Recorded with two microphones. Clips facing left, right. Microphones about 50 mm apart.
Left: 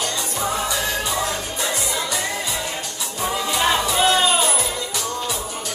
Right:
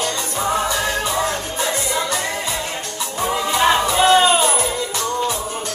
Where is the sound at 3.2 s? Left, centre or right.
Centre.